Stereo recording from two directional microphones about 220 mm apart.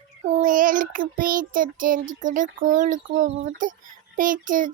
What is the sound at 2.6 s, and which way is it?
A child's voice, 35° right (ahead or behind).